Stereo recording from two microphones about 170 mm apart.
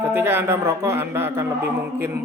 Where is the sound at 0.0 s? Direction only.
15° right (ahead or behind).